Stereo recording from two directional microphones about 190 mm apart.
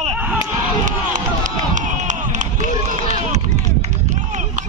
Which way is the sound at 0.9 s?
40° right (ahead or behind).